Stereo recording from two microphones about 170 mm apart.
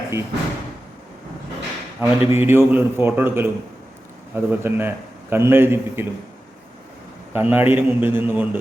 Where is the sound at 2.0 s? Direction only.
15° right (ahead or behind).